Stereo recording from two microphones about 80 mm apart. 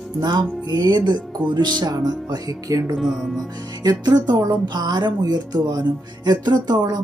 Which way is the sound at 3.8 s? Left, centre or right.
Right.